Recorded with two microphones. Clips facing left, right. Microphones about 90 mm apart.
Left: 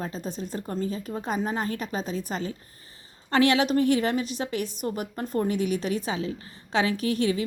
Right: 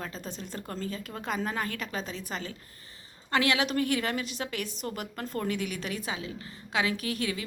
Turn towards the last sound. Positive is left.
turn(degrees=30)  # may be behind; listen again after turning